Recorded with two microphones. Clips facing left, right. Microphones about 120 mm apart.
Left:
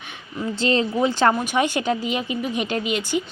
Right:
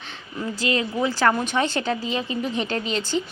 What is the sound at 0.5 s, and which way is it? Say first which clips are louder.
A woman's voice: left 4 dB; 30° left (ahead or behind).